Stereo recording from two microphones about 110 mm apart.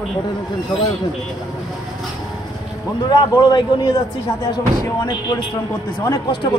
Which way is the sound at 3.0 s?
40° left (ahead or behind).